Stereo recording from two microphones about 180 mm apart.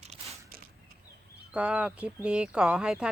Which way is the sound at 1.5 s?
5° right (ahead or behind).